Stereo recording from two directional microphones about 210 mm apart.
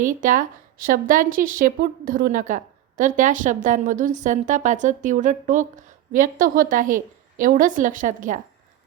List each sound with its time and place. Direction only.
0.0 s a woman's voice: 40° right (ahead or behind)